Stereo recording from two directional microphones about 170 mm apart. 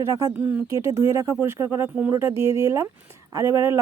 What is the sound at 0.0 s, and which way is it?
Speech, 15° right (ahead or behind).